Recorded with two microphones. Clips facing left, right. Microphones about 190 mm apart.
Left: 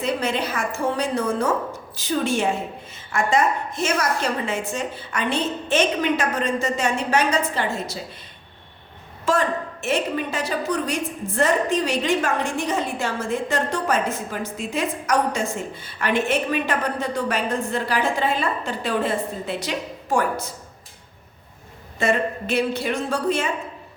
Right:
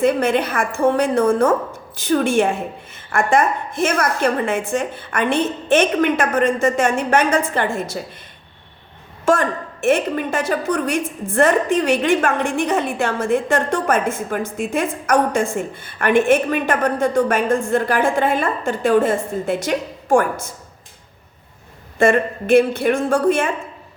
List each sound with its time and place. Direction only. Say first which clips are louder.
0.0 s a woman's voice: right 7 dB; 55° right (ahead or behind)
9.2 s a woman's voice: right 4 dB; 50° right (ahead or behind)
21.9 s a woman's voice: right 6 dB; 50° right (ahead or behind)